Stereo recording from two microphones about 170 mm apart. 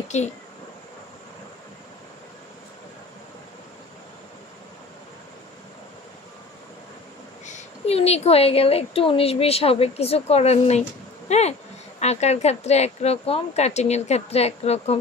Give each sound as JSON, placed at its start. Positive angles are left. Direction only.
{"t": 0.1, "sound": "speech", "side_deg": 45}
{"t": 7.4, "sound": "a woman's voice", "side_deg": 40}